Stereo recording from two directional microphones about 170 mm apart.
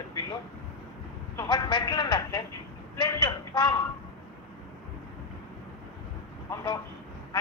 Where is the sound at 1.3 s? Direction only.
25° left (ahead or behind).